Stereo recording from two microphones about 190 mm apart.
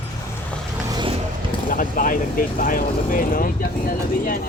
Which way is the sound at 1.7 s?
45° left (ahead or behind).